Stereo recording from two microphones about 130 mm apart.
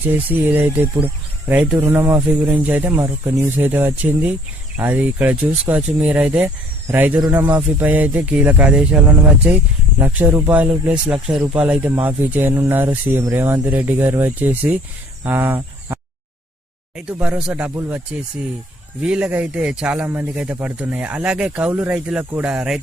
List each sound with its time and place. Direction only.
0.0 s speech: 15° right (ahead or behind)
2.9 s speech: 25° right (ahead or behind); by 9.0 s 10° right (ahead or behind)
10.0 s speech: 10° right (ahead or behind)
19.0 s speech: 10° right (ahead or behind)